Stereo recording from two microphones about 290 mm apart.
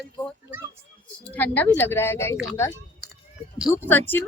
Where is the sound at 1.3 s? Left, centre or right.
Centre.